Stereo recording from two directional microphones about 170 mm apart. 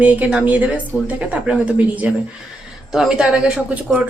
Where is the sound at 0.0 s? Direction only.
10° right (ahead or behind).